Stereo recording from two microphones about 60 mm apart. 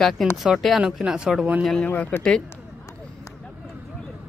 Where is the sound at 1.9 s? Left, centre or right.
Left.